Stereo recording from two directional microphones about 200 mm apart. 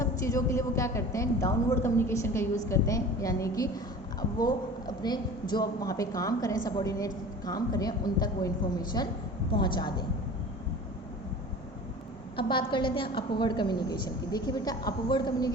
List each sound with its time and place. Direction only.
0.0 s a woman's voice: 15° left (ahead or behind)
12.4 s a woman's voice: 25° left (ahead or behind)